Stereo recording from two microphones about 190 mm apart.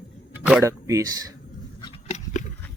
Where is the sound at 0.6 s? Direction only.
15° right (ahead or behind).